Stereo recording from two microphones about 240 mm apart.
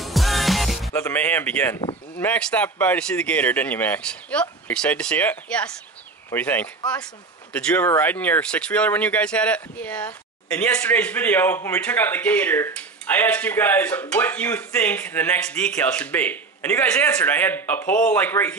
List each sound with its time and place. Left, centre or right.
0.0 s music: centre
0.9 s speech: centre